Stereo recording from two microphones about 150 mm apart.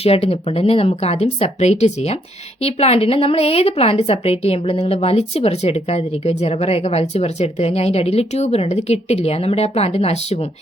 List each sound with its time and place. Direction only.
0.0 s a woman's voice: 40° left (ahead or behind)